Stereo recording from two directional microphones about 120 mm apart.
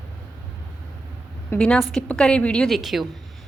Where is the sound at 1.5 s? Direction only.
10° left (ahead or behind).